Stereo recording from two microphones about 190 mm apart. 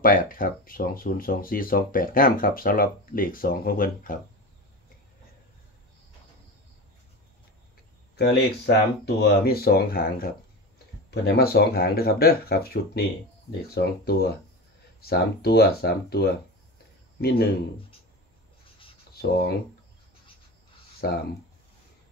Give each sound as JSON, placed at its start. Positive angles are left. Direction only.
{"t": 0.0, "sound": "speech", "side_deg": 45}
{"t": 8.2, "sound": "speech", "side_deg": 60}
{"t": 19.2, "sound": "speech", "side_deg": 60}
{"t": 21.0, "sound": "speech", "side_deg": 55}